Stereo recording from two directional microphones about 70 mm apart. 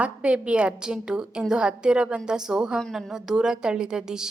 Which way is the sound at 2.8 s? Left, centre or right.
Centre.